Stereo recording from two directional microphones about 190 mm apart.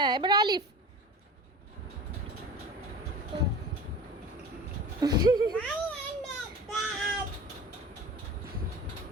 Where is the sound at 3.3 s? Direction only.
30° right (ahead or behind).